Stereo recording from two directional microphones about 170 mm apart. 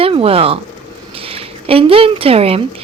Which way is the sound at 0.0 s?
35° right (ahead or behind).